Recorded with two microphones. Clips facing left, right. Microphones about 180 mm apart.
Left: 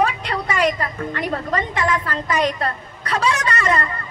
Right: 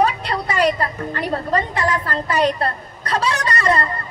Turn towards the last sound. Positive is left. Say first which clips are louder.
# right 2 dB
turn(degrees=-35)  # may be behind; listen again after turning